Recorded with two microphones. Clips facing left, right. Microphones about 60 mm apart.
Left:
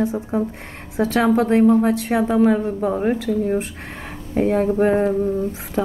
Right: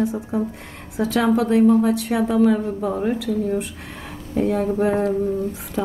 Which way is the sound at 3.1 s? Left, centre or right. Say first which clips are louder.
Left 2 dB; left.